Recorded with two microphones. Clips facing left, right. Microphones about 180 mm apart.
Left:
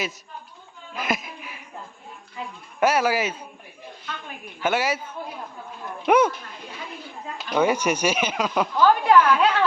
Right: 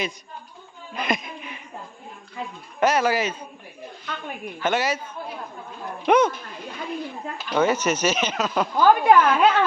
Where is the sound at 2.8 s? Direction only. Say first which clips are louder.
Even; 10° left (ahead or behind).